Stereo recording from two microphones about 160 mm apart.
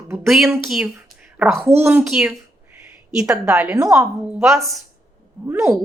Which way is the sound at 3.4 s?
5° right (ahead or behind).